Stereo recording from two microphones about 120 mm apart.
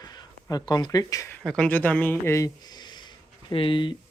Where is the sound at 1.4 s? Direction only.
5° left (ahead or behind).